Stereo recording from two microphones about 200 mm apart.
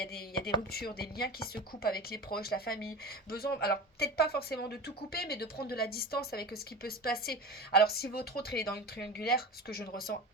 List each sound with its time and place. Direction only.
0.0 s speech: 50° left (ahead or behind)